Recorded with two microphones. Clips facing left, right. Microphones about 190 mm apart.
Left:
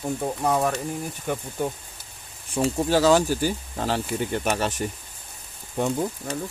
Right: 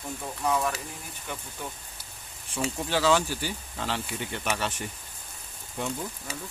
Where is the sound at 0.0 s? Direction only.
45° left (ahead or behind).